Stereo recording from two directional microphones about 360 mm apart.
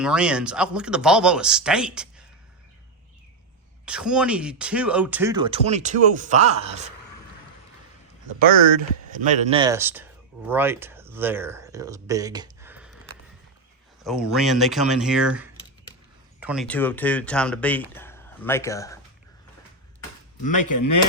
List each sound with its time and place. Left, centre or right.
0.0 s speech: centre
3.8 s speech: centre
8.4 s speech: right; by 13.0 s centre
14.0 s speech: centre
20.6 s speech: left